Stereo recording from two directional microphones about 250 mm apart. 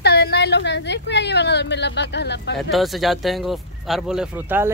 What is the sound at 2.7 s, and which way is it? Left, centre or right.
Speech, centre.